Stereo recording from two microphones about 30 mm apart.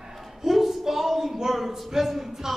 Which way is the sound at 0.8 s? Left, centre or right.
Centre.